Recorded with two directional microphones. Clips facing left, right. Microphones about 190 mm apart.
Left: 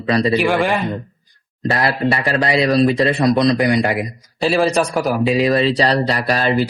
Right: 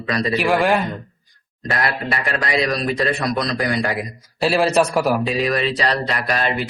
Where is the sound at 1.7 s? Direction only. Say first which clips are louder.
Left 5 dB; 30° left (ahead or behind).